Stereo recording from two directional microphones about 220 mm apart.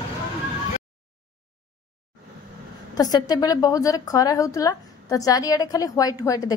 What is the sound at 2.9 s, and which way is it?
A woman's voice, 15° left (ahead or behind).